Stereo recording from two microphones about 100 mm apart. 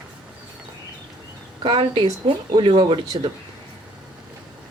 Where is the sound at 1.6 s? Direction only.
60° right (ahead or behind).